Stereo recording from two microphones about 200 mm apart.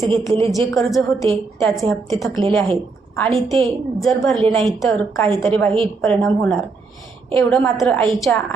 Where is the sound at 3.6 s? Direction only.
Centre (ahead or behind).